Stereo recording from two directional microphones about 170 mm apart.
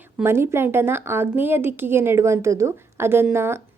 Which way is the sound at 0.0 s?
15° right (ahead or behind).